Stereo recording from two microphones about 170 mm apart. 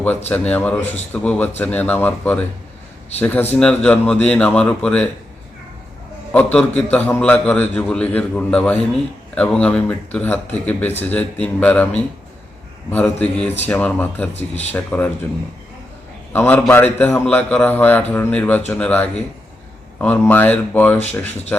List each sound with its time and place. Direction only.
0.3 s a man's voice: 10° left (ahead or behind)
6.3 s a man's voice: 10° left (ahead or behind)
14.3 s speech: 40° left (ahead or behind)
14.7 s a man's voice: 10° left (ahead or behind)
16.3 s a man's voice: 10° left (ahead or behind)